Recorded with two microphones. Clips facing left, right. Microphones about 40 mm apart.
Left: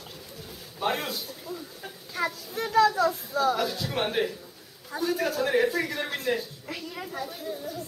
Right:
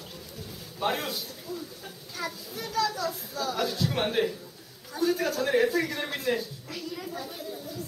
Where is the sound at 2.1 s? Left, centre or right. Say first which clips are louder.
Left 6 dB; left.